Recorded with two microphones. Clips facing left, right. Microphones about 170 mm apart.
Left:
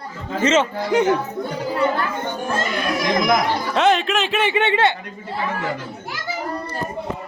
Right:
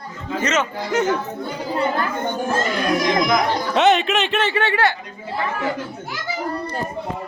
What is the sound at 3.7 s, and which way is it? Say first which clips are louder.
Speech: right 1 dB; centre (ahead or behind).